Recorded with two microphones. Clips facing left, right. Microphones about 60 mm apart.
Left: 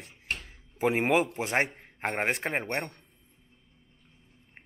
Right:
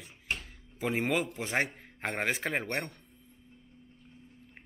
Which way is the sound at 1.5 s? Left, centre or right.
Left.